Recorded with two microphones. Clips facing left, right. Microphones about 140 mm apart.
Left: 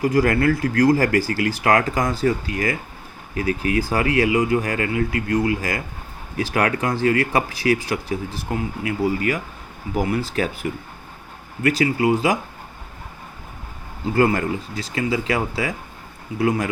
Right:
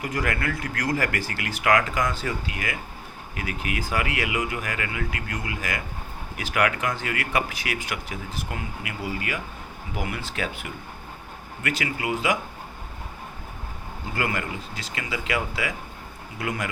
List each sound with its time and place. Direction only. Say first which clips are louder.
0.0 s speech: left 10 dB; 35° left (ahead or behind)
14.2 s speech: left 10 dB; 35° left (ahead or behind)